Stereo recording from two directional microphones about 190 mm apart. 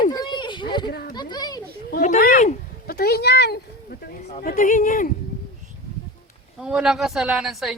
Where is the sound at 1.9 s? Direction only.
45° left (ahead or behind).